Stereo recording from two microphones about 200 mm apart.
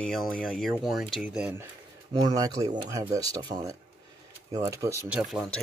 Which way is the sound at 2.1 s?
20° right (ahead or behind).